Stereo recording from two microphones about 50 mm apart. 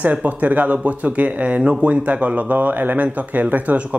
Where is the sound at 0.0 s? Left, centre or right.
Right.